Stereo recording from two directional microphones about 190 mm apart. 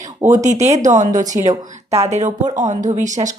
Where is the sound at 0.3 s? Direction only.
40° right (ahead or behind).